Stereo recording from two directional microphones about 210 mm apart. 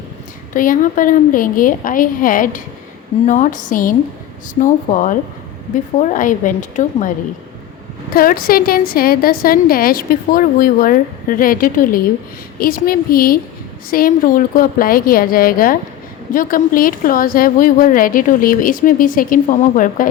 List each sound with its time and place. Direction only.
0.5 s a woman's voice: 40° left (ahead or behind)
8.1 s a woman's voice: 45° left (ahead or behind)